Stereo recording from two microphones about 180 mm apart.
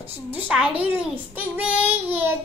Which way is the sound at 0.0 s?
10° right (ahead or behind).